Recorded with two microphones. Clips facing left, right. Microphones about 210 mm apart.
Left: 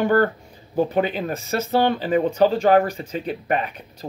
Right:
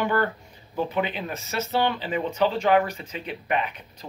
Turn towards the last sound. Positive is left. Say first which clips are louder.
# left 4 dB
turn(degrees=40)  # may be behind; listen again after turning